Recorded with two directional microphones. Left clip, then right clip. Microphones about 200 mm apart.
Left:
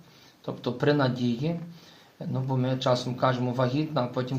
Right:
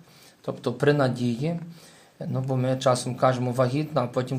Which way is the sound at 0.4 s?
45° right (ahead or behind).